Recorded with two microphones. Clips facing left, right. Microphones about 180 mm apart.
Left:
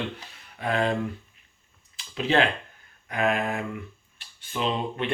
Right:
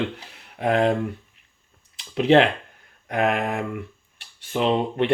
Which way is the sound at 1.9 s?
65° right (ahead or behind).